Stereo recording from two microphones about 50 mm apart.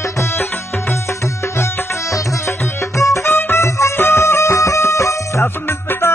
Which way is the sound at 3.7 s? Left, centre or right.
Left.